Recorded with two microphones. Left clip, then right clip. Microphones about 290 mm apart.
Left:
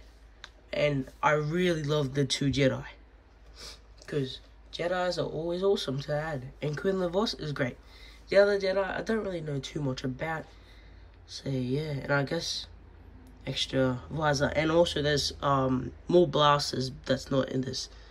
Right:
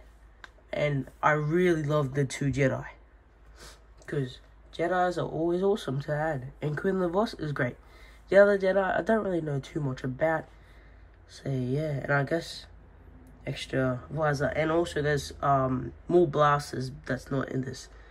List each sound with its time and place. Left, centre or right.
0.4 s speech: centre